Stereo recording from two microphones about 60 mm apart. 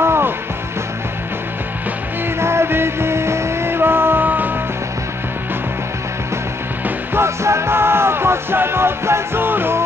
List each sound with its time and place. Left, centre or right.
0.0 s music: right
2.4 s music: right
7.2 s music: right